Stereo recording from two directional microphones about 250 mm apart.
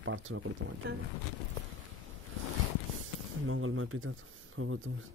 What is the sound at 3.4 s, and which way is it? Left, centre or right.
Speech, right.